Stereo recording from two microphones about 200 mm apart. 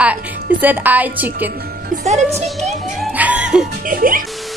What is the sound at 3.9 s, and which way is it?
Speech, 45° right (ahead or behind).